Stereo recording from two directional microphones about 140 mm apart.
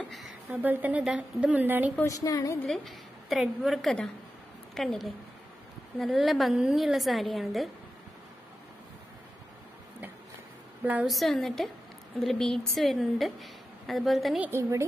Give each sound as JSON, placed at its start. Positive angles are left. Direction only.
{"t": 0.0, "sound": "a sound", "side_deg": 0}
{"t": 0.5, "sound": "a woman's voice", "side_deg": -15}
{"t": 2.0, "sound": "a woman's voice", "side_deg": 25}
{"t": 2.6, "sound": "a woman's voice", "side_deg": 0}
{"t": 10.8, "sound": "a woman's voice", "side_deg": -10}
{"t": 11.1, "sound": "a woman's voice", "side_deg": 0}
{"t": 14.4, "sound": "a woman's voice", "side_deg": -20}